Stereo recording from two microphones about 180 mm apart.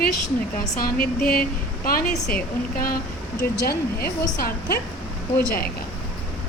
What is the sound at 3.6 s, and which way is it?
Speech, 60° left (ahead or behind).